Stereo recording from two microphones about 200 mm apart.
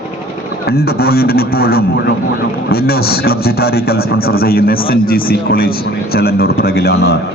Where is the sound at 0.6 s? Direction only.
50° left (ahead or behind).